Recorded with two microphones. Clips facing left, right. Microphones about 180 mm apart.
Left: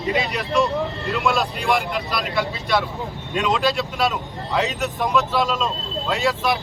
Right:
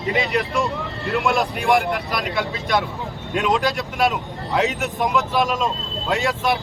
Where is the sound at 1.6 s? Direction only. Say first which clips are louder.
Right 5 dB; 20° right (ahead or behind).